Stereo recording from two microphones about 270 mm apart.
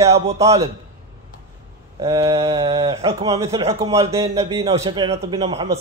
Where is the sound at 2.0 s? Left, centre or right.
Centre.